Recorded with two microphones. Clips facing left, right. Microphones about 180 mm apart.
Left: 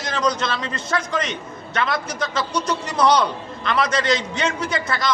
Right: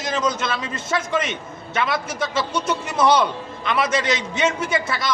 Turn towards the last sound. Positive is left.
turn(degrees=-5)  # may be behind; listen again after turning